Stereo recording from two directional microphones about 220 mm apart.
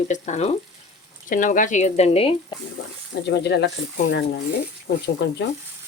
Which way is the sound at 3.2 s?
50° left (ahead or behind).